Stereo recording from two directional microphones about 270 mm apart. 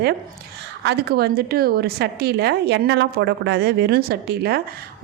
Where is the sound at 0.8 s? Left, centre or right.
Right.